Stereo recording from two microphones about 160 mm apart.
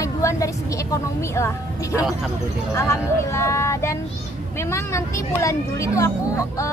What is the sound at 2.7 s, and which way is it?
Speech, 15° left (ahead or behind).